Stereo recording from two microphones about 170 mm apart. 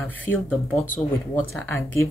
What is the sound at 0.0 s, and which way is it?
Speech, 10° left (ahead or behind).